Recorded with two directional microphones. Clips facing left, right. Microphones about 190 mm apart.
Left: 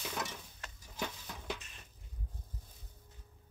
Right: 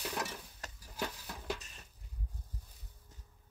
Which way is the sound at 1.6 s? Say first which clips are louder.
Right 1 dB; 40° right (ahead or behind).